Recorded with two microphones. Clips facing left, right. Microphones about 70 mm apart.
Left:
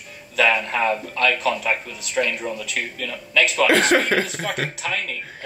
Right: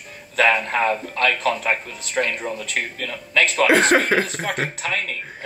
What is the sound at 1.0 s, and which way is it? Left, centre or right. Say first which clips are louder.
Speech: even; right.